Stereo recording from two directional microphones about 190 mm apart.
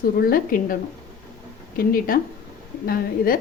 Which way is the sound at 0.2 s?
50° left (ahead or behind).